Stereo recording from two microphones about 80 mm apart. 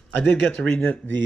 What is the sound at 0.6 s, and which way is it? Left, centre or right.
Speech, centre.